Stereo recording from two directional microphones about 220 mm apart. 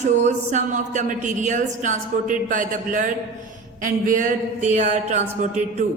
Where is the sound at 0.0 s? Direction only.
35° right (ahead or behind).